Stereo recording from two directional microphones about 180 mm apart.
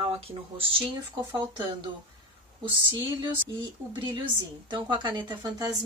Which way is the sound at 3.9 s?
25° right (ahead or behind).